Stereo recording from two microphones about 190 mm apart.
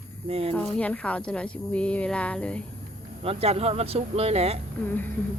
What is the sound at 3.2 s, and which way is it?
Speech, 30° right (ahead or behind).